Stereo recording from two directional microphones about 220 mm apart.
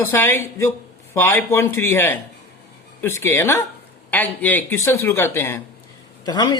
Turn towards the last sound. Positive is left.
turn(degrees=20)  # may be behind; listen again after turning